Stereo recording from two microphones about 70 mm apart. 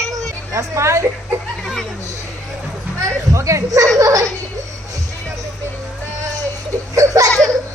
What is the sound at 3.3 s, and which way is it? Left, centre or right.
Speech, right.